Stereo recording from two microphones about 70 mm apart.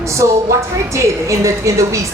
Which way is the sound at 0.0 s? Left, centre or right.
Right.